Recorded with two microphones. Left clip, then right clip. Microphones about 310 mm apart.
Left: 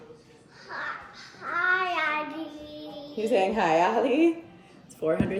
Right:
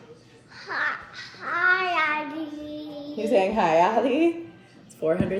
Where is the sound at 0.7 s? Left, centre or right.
Right.